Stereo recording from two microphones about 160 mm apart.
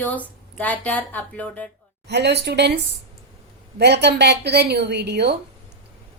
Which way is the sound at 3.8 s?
90° right.